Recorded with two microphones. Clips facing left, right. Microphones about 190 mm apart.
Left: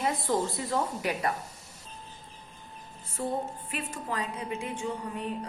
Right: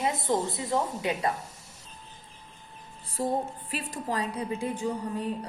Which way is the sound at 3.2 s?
35° right (ahead or behind).